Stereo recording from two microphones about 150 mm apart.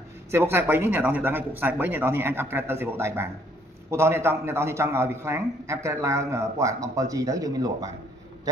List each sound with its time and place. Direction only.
0.3 s a man's voice: 15° right (ahead or behind)